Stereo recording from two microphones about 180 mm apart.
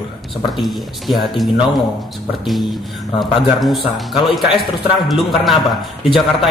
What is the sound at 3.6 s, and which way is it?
Speech, centre (ahead or behind).